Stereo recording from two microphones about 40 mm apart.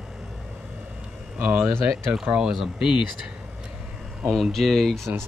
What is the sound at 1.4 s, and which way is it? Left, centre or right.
Speech, right.